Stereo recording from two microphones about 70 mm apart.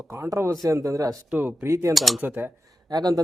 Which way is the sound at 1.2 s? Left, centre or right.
Right.